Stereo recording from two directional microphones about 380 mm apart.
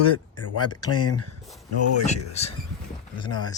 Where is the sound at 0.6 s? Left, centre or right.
Centre.